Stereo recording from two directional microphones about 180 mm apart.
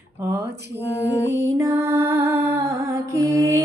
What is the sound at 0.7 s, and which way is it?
Mantra, 70° right (ahead or behind).